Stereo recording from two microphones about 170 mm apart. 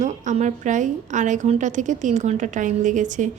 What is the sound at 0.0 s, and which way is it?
A woman's voice, 45° right (ahead or behind).